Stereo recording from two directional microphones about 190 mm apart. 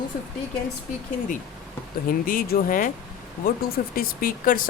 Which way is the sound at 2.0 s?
45° left (ahead or behind).